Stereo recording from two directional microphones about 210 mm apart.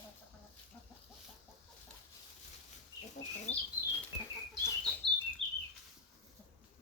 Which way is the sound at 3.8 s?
15° left (ahead or behind).